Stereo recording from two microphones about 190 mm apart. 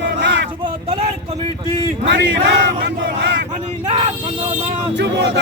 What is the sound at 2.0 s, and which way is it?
A man's voice, 65° right (ahead or behind).